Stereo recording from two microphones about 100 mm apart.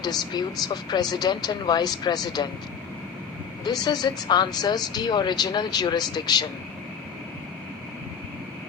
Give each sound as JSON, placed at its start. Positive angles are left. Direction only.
{"t": 0.0, "sound": "speech", "side_deg": 45}
{"t": 3.6, "sound": "speech", "side_deg": 45}